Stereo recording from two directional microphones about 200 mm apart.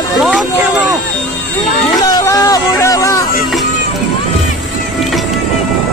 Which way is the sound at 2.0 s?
20° left (ahead or behind).